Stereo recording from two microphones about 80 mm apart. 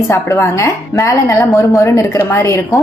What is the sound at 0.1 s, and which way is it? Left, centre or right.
A woman's voice, left.